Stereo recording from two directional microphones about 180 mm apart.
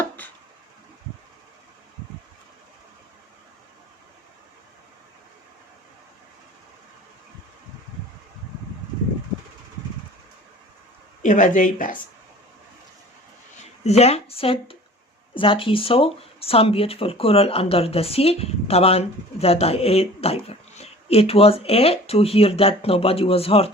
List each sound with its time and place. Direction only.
11.2 s speech: 45° left (ahead or behind)
13.8 s speech: 35° left (ahead or behind)